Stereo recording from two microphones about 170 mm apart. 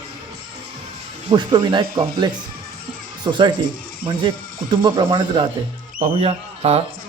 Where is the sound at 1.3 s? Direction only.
25° right (ahead or behind).